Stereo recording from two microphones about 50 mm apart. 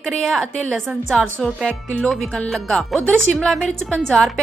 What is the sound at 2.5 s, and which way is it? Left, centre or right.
A woman's voice, centre.